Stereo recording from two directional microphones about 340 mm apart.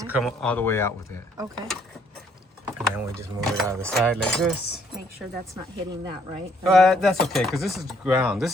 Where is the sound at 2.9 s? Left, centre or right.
Centre.